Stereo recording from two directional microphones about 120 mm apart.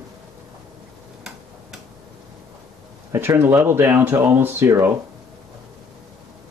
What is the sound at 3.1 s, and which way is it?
Speech, 20° right (ahead or behind).